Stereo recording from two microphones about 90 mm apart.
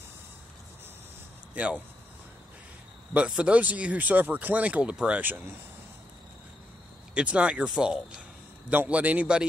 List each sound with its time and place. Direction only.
1.5 s speech: 15° right (ahead or behind)
3.1 s speech: 15° right (ahead or behind)
7.2 s speech: 10° right (ahead or behind)
8.6 s speech: 15° right (ahead or behind)